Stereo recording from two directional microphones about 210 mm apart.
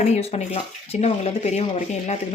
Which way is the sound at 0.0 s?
30° left (ahead or behind).